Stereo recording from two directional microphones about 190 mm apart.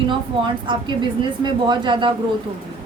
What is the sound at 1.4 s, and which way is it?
Speech, 25° right (ahead or behind).